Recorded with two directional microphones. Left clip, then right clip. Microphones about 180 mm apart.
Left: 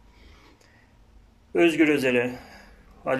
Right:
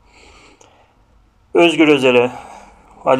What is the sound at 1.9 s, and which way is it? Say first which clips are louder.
Speech: right 11 dB; 50° right (ahead or behind).